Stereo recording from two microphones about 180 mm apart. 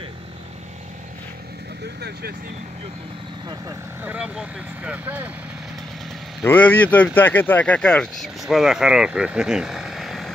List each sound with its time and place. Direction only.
2.0 s speech: 60° right (ahead or behind)
4.0 s speech: 5° right (ahead or behind)
6.4 s speech: 10° left (ahead or behind)